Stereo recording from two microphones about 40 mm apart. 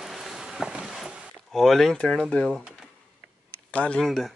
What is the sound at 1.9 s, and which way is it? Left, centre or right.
Speech, left.